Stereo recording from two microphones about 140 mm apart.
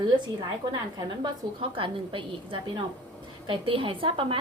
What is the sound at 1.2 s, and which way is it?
A woman's voice, 40° right (ahead or behind).